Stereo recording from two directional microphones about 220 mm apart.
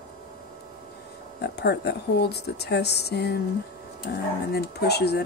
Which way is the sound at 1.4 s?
50° left (ahead or behind).